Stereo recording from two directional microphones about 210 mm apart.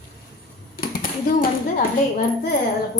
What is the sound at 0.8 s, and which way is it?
Typing, 45° left (ahead or behind).